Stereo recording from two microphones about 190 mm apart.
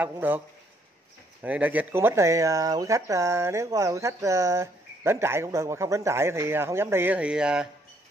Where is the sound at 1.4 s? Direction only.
10° right (ahead or behind).